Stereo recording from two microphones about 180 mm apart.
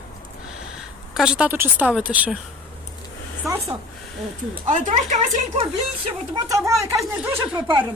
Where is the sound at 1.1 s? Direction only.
5° right (ahead or behind).